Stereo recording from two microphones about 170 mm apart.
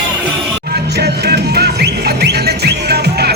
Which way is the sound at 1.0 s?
70° right (ahead or behind).